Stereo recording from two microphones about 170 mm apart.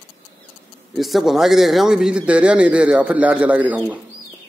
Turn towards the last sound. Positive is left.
turn(degrees=-10)  # may be behind; listen again after turning